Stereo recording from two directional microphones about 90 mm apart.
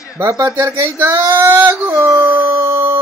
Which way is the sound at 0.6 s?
30° right (ahead or behind).